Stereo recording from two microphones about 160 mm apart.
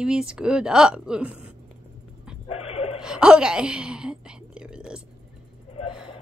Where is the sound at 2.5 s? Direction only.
40° left (ahead or behind).